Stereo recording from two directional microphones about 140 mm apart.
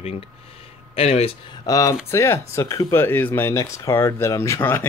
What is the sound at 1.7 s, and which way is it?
Speech, 25° left (ahead or behind).